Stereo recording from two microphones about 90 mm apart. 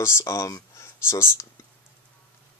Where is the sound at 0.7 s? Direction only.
30° left (ahead or behind).